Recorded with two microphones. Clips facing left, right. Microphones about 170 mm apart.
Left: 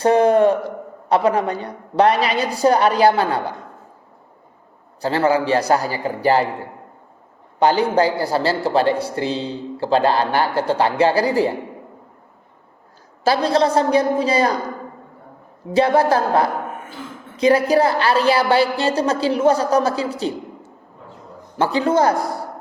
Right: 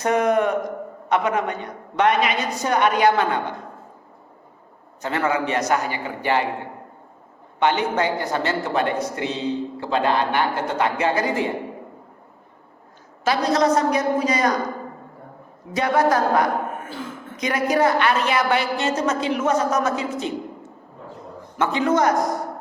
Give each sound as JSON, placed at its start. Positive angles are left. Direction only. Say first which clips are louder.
{"t": 0.0, "sound": "a man's voice", "louder": "left 5 dB", "side_deg": 30}
{"t": 5.0, "sound": "a man's voice", "louder": "left 5 dB", "side_deg": 30}
{"t": 7.6, "sound": "a man's voice", "louder": "left 5 dB", "side_deg": 35}
{"t": 13.2, "sound": "a man's voice", "louder": "left 2 dB", "side_deg": 30}
{"t": 15.7, "sound": "a woman's voice", "louder": "left 4 dB", "side_deg": 30}